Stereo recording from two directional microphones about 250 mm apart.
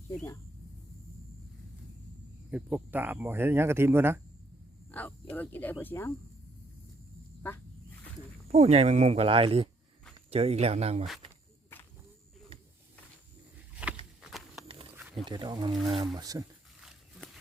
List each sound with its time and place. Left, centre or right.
2.5 s speech: centre
4.9 s speech: centre
7.4 s speech: centre
8.4 s speech: right
13.8 s walk: centre
14.2 s horse: centre
14.7 s wild animals: right
14.9 s wild animals: centre
15.2 s speech: centre